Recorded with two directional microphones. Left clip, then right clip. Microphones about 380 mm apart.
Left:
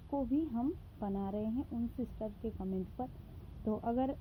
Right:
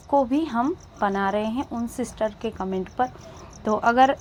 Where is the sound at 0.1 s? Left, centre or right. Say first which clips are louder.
Right 15 dB; centre.